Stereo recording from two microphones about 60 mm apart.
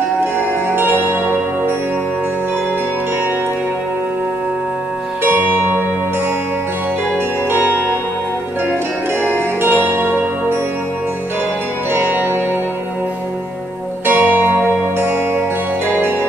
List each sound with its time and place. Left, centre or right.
0.2 s music: right
5.2 s music: right
9.6 s music: right
11.9 s music: right
14.0 s music: right